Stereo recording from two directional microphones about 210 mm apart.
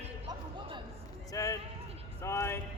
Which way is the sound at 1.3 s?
15° left (ahead or behind).